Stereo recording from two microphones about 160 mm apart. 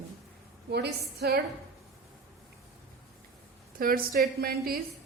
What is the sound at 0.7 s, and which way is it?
Speech, 90° right.